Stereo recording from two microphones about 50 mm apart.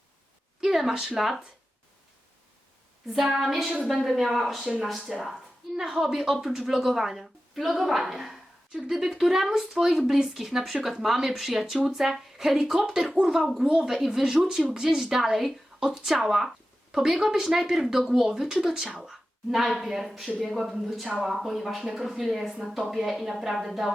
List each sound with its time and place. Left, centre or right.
0.6 s speech: centre
3.1 s speech: centre